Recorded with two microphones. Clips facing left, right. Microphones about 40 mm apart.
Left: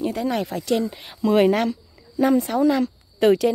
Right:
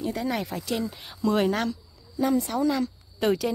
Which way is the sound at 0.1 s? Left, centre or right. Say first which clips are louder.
Left 4 dB; centre.